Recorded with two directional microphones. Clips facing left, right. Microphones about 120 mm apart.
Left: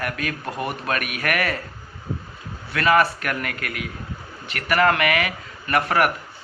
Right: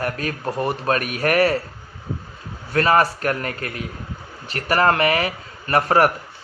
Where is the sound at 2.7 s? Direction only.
35° right (ahead or behind).